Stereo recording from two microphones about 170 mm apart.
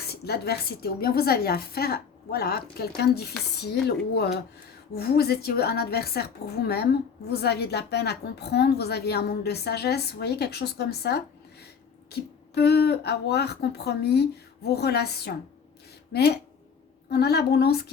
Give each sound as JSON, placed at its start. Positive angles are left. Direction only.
{"t": 0.1, "sound": "a woman's voice", "side_deg": 70}
{"t": 17.1, "sound": "a woman's voice", "side_deg": 70}